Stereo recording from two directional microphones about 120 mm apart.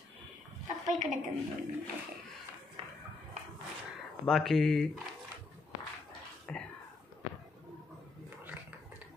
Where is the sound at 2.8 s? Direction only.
45° right (ahead or behind).